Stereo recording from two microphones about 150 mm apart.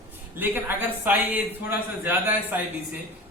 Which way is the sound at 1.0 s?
10° right (ahead or behind).